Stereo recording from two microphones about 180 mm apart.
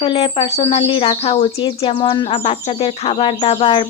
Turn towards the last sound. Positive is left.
turn(degrees=30)  # may be behind; listen again after turning